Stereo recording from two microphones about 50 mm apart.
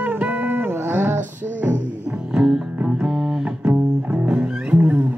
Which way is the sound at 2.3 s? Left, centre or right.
Centre.